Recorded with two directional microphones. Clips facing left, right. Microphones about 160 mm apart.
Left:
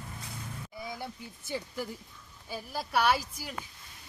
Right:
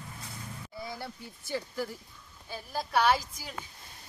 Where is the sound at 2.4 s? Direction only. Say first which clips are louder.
Right 1 dB; 10° left (ahead or behind).